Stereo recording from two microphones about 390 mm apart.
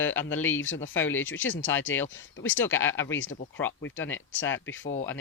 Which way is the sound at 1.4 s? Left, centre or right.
Left.